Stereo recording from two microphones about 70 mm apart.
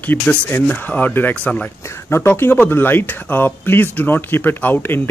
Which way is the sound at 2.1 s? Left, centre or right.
Left.